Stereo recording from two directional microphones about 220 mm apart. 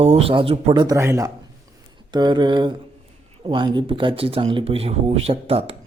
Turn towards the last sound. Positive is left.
turn(degrees=-25)  # may be behind; listen again after turning